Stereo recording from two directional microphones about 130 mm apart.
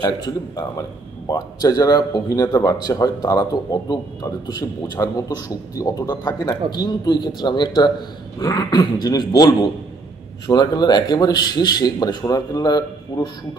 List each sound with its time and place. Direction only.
0.0 s a man's voice: 30° left (ahead or behind)